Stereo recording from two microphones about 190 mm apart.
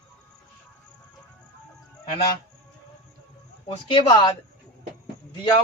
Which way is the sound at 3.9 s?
25° left (ahead or behind).